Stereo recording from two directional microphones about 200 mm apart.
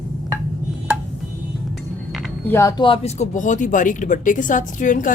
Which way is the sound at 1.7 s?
Centre (ahead or behind).